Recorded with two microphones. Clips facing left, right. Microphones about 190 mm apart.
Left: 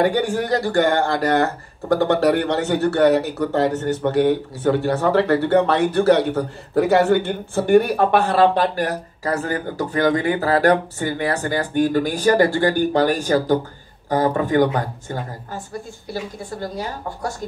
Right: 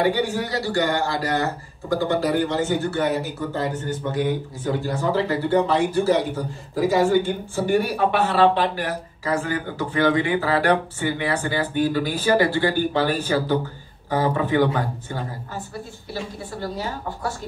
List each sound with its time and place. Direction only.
0.0 s speech: 50° left (ahead or behind)
16.6 s speech: 45° left (ahead or behind)